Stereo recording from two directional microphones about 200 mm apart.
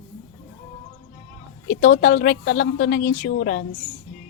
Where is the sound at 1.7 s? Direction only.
40° left (ahead or behind).